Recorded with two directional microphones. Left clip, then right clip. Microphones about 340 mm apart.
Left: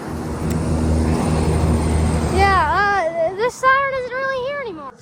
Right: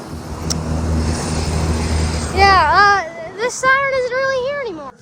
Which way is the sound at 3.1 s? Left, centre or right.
Centre.